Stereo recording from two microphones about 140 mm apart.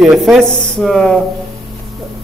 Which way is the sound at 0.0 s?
Centre (ahead or behind).